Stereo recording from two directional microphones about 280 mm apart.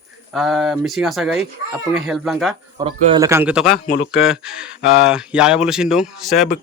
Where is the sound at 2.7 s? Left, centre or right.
Centre.